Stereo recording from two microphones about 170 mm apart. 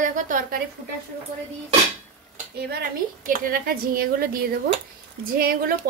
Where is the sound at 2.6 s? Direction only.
70° right (ahead or behind).